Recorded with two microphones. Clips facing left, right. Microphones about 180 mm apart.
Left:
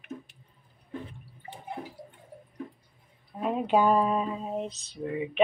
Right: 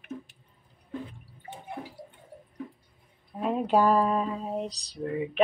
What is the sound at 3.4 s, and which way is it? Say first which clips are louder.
Speech: right 1 dB; centre (ahead or behind).